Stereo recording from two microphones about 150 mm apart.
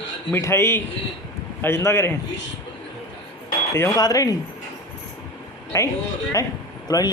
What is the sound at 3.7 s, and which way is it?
Speech, 20° left (ahead or behind).